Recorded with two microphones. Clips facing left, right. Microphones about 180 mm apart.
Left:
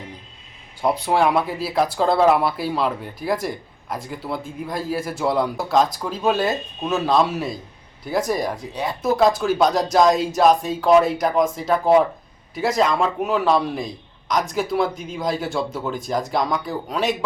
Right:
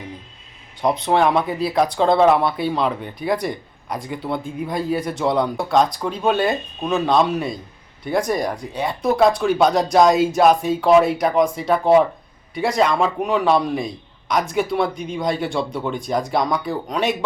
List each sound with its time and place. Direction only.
0.8 s speech: 5° left (ahead or behind)